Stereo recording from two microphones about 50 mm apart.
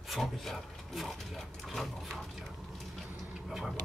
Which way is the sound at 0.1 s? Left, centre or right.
Centre.